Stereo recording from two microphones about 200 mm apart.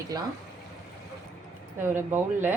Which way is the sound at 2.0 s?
10° right (ahead or behind).